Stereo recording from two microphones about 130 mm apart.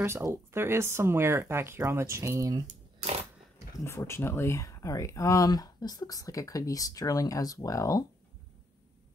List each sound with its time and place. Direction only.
0.0 s speech: 20° right (ahead or behind)
2.6 s a sound: 55° right (ahead or behind)
3.8 s speech: 20° left (ahead or behind)